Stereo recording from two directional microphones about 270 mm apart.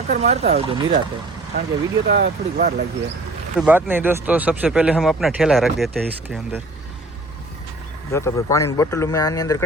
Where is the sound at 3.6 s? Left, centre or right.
Centre.